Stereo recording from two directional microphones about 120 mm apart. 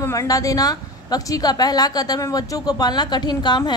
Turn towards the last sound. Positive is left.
turn(degrees=35)  # may be behind; listen again after turning